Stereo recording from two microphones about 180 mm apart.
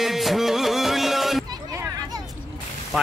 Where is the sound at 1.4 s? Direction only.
20° right (ahead or behind).